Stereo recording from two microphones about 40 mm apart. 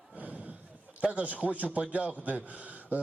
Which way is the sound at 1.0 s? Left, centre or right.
Right.